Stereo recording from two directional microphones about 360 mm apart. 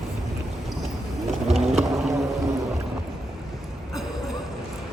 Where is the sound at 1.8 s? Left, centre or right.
Centre.